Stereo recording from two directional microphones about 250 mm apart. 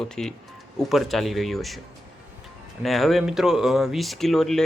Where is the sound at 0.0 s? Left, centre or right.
Centre.